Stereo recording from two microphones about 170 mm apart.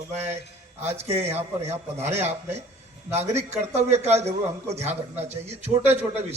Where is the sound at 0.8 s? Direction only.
40° right (ahead or behind).